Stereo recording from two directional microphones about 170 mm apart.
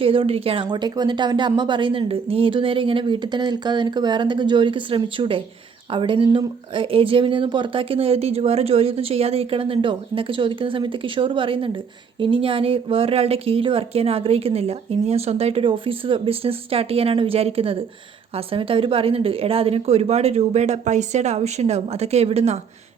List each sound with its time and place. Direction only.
0.0 s speech: 30° right (ahead or behind)